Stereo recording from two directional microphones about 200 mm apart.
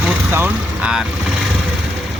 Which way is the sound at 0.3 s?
10° right (ahead or behind).